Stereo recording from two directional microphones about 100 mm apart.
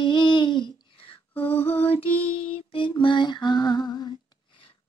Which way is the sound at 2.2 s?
60° left (ahead or behind).